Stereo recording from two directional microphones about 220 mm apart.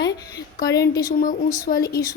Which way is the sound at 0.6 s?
15° left (ahead or behind).